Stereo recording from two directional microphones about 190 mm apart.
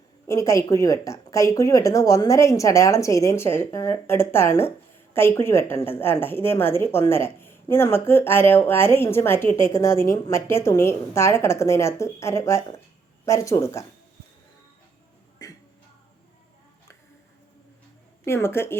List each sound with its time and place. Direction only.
0.3 s a woman's voice: 15° left (ahead or behind)
15.4 s music: 20° left (ahead or behind)
18.3 s a woman's voice: 15° left (ahead or behind)